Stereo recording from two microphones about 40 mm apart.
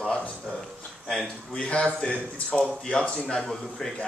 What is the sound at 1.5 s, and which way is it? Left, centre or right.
Speech, left.